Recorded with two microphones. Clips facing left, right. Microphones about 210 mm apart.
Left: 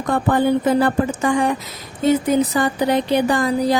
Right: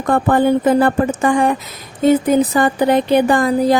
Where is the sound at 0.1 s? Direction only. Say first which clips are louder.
Right 3 dB; 50° right (ahead or behind).